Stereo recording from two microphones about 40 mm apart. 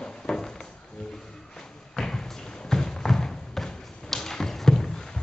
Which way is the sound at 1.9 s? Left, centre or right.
Centre.